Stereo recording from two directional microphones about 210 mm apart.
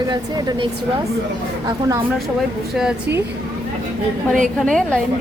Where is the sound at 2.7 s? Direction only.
5° right (ahead or behind).